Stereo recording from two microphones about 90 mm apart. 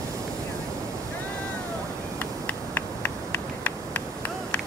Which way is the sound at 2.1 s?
20° left (ahead or behind).